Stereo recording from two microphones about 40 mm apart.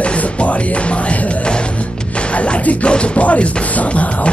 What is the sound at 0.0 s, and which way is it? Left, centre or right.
Music, left.